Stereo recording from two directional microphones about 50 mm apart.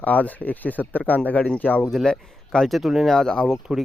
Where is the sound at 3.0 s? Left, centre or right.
Centre.